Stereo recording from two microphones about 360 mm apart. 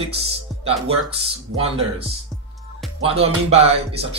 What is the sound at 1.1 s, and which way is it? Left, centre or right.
Speech, centre.